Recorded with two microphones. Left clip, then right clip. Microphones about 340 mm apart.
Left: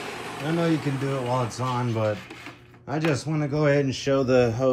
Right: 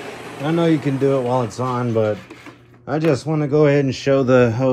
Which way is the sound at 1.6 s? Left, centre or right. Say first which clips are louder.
Right 7 dB; centre.